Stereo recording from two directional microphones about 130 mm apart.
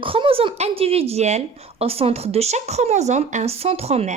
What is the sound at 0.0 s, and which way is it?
Speech, 45° right (ahead or behind).